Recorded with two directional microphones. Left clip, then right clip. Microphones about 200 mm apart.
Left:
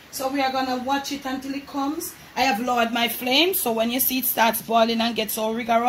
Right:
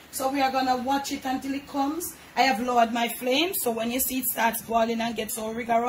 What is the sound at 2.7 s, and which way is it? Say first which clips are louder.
A woman's voice: left 1 dB; 45° left (ahead or behind).